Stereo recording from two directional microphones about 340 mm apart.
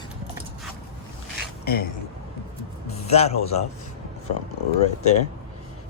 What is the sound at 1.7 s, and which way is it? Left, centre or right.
Speech, left.